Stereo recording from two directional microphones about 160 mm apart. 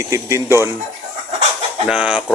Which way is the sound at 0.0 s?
20° right (ahead or behind).